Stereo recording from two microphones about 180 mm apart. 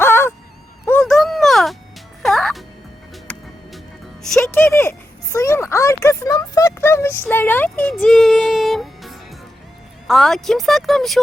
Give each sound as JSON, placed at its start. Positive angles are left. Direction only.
{"t": 0.0, "sound": "honk", "side_deg": 15}
{"t": 1.0, "sound": "a sound", "side_deg": 0}
{"t": 2.2, "sound": "music", "side_deg": 0}
{"t": 4.2, "sound": "music", "side_deg": 0}
{"t": 4.5, "sound": "a sound", "side_deg": 10}
{"t": 10.1, "sound": "speech", "side_deg": 0}